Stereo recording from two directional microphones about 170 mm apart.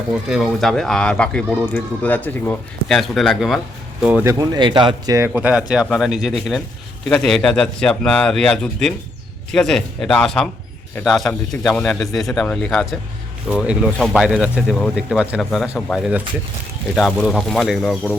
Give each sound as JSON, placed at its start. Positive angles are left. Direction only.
{"t": 0.1, "sound": "speech", "side_deg": 0}
{"t": 3.0, "sound": "speech", "side_deg": 0}
{"t": 4.0, "sound": "speech", "side_deg": -10}
{"t": 5.3, "sound": "speech", "side_deg": -5}
{"t": 17.1, "sound": "speech", "side_deg": 5}